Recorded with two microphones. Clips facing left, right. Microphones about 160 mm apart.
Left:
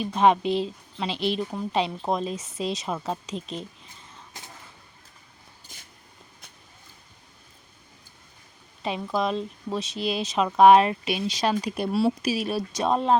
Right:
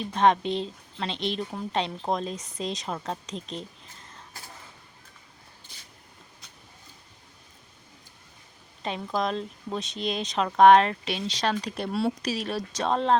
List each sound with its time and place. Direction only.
0.0 s a woman's voice: 5° left (ahead or behind)
8.8 s speech: 5° left (ahead or behind)